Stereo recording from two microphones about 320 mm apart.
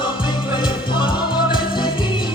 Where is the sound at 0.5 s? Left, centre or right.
Centre.